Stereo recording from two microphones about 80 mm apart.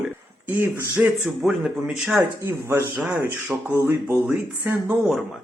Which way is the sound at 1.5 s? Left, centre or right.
Centre.